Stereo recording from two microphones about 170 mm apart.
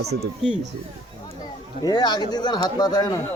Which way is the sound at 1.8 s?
25° left (ahead or behind).